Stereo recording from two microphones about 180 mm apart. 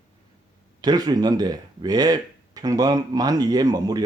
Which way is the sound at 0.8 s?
20° right (ahead or behind).